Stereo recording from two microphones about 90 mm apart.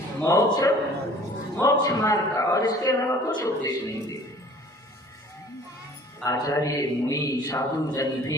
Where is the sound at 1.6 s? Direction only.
40° left (ahead or behind).